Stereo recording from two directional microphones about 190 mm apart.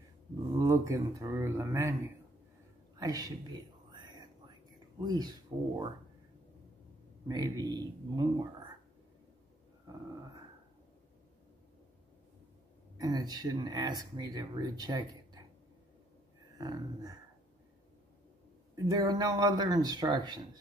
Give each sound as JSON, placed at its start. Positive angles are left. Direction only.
{"t": 0.5, "sound": "speech", "side_deg": -15}
{"t": 3.0, "sound": "whispering", "side_deg": -20}
{"t": 5.0, "sound": "speech", "side_deg": -20}
{"t": 7.2, "sound": "speech", "side_deg": -20}
{"t": 12.9, "sound": "speech", "side_deg": -20}
{"t": 16.5, "sound": "speech", "side_deg": -20}
{"t": 18.9, "sound": "speech", "side_deg": -20}